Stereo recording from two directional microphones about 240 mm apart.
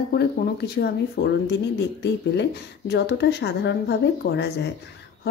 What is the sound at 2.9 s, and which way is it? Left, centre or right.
A woman's voice, left.